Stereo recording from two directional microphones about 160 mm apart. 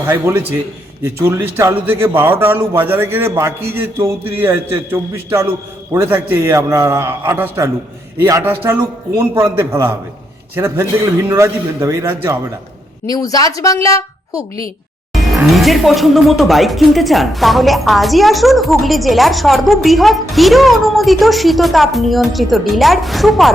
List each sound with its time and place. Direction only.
0.1 s a man's voice: 10° right (ahead or behind)
13.1 s speech: 20° left (ahead or behind)
15.1 s speech: centre (ahead or behind)